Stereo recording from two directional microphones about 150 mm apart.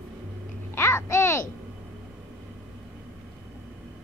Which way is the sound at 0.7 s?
15° left (ahead or behind).